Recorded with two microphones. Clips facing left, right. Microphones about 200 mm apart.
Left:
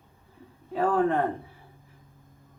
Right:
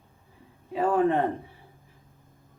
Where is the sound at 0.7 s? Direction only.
15° right (ahead or behind).